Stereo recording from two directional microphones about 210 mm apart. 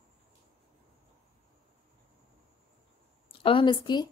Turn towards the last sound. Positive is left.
turn(degrees=20)  # may be behind; listen again after turning